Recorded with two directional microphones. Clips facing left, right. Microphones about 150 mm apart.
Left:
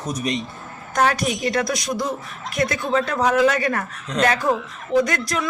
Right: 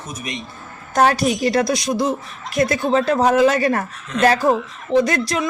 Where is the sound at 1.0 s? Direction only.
30° right (ahead or behind).